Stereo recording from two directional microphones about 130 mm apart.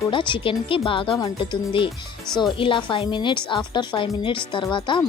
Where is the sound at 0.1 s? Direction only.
40° left (ahead or behind).